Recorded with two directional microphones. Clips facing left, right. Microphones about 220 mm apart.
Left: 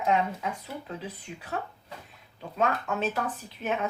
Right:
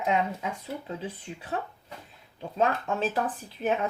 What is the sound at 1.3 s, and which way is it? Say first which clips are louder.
Speech: even; 35° right (ahead or behind).